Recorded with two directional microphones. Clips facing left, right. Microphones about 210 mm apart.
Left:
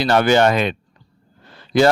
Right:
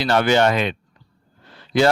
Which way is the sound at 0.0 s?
45° left (ahead or behind).